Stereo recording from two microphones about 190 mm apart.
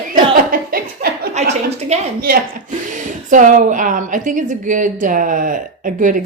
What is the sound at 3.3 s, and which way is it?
A woman's voice, 45° right (ahead or behind).